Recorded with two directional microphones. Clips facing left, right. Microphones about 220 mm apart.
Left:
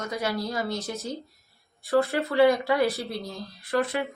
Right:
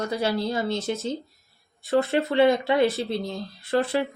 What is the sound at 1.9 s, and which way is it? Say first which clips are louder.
Speech: right 1 dB; 25° right (ahead or behind).